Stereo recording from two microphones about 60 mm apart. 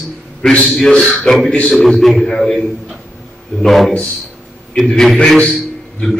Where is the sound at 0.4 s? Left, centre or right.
Centre.